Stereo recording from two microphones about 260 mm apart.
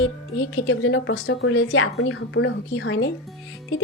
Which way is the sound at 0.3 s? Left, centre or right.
Left.